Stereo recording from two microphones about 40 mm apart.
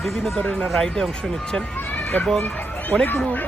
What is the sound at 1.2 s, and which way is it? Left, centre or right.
Speech, centre.